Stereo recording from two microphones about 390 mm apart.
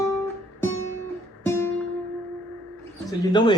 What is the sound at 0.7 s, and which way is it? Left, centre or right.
Music, right.